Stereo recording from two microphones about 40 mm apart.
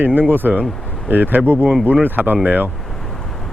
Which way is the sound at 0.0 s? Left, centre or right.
Right.